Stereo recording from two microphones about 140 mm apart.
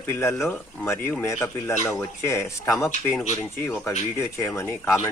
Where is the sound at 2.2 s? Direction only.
20° left (ahead or behind).